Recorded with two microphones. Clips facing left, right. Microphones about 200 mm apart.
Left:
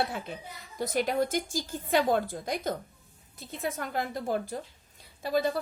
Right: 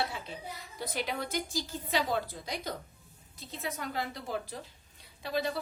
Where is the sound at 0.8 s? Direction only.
45° left (ahead or behind).